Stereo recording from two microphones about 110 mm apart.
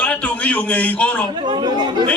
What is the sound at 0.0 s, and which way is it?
A man's voice, 10° left (ahead or behind).